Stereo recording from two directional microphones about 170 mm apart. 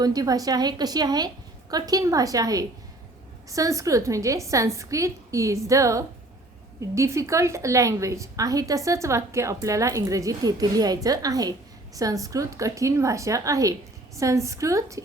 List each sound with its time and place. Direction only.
0.0 s a woman's voice: 20° right (ahead or behind)